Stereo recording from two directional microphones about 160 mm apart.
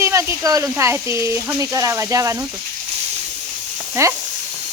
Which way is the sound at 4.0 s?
20° right (ahead or behind).